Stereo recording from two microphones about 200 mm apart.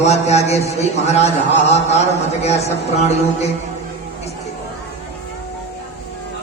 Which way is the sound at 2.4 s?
30° left (ahead or behind).